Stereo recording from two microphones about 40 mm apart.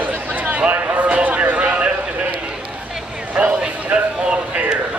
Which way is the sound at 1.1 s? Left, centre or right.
Right.